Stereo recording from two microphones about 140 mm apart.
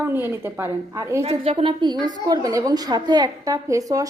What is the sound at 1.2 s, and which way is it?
Speech, 45° right (ahead or behind).